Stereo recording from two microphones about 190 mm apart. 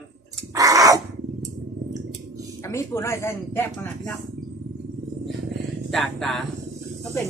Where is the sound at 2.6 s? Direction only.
15° left (ahead or behind).